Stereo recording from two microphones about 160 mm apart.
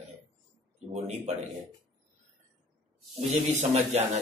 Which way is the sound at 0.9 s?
45° right (ahead or behind).